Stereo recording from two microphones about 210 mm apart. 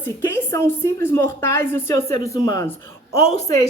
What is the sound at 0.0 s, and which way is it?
A woman's voice, 10° left (ahead or behind).